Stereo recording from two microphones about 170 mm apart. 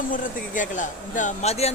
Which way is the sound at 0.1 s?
50° left (ahead or behind).